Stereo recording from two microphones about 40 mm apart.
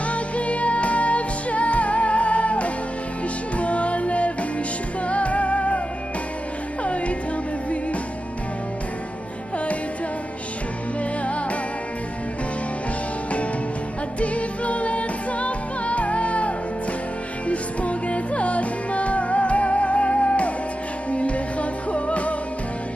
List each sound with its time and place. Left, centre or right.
0.0 s music: left
6.8 s music: left
14.2 s music: left